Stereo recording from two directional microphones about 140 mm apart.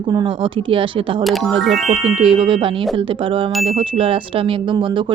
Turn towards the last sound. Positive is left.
turn(degrees=-35)  # may be behind; listen again after turning